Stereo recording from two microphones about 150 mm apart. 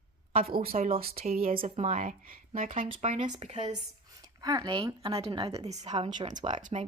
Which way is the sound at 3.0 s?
50° right (ahead or behind).